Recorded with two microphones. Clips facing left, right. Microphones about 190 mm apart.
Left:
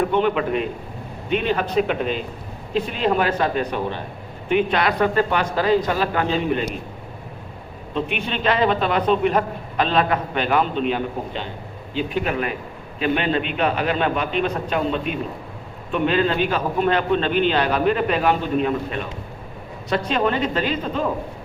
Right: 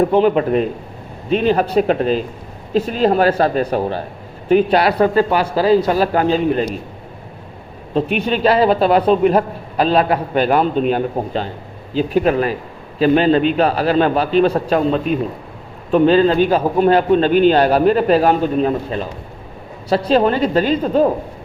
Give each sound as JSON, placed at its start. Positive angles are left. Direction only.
{"t": 0.0, "sound": "a man's voice", "side_deg": -35}
{"t": 7.9, "sound": "a man's voice", "side_deg": -40}
{"t": 20.1, "sound": "a man's voice", "side_deg": -35}